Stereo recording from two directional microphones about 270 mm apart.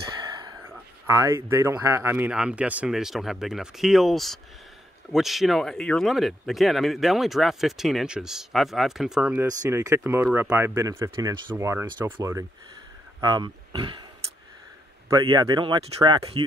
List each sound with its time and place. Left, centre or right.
0.4 s speech: centre
15.0 s speech: centre